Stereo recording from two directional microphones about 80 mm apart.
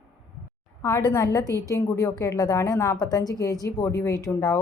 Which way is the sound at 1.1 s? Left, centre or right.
Left.